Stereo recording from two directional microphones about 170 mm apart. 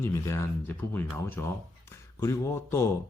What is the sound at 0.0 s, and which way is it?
A man's voice, 15° left (ahead or behind).